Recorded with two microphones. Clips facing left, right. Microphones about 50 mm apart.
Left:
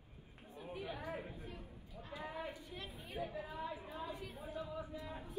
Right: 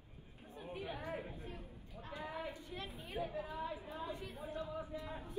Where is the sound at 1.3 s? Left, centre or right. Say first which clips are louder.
Right 1 dB; right.